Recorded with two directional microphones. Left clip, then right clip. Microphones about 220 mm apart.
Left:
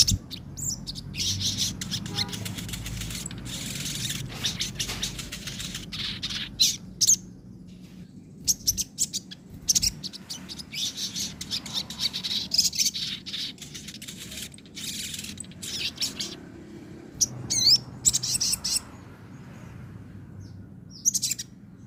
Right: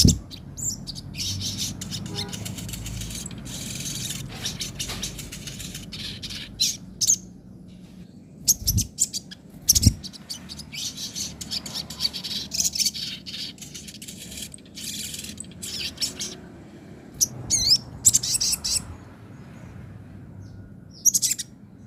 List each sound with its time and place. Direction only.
0.1 s bird: 15° left (ahead or behind)
8.7 s bird: 10° left (ahead or behind)
9.7 s mouse: 20° right (ahead or behind)
10.0 s bird: 15° left (ahead or behind)
17.5 s a sound: centre (ahead or behind)
18.1 s bird: 15° right (ahead or behind)
21.0 s bird: 15° right (ahead or behind)